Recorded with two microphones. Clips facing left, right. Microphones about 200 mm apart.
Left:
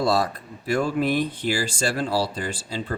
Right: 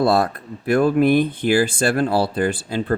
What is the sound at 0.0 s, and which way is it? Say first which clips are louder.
Speech: right 5 dB; 55° right (ahead or behind).